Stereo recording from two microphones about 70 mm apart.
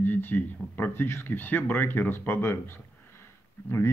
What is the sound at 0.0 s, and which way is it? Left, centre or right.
Speech, left.